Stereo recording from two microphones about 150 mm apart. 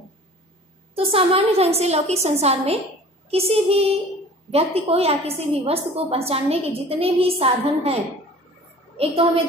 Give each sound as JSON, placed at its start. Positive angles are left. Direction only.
{"t": 0.9, "sound": "a woman's voice", "side_deg": -40}